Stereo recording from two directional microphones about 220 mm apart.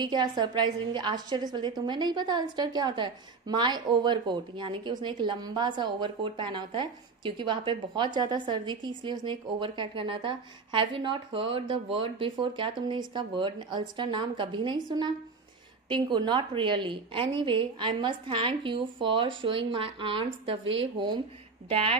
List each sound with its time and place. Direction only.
0.0 s a woman's voice: 20° right (ahead or behind)